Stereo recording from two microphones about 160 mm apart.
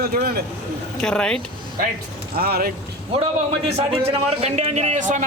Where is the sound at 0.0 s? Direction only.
70° right (ahead or behind).